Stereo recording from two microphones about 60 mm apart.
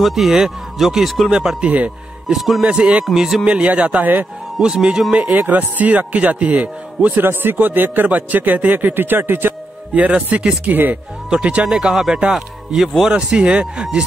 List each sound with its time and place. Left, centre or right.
0.0 s speech: centre
1.3 s speech: centre
2.2 s speech: centre
2.6 s speech: centre
3.4 s a man's voice: right
4.6 s speech: centre
5.1 s a man's voice: right
9.9 s a man's voice: right
11.2 s speech: centre
13.1 s a man's voice: centre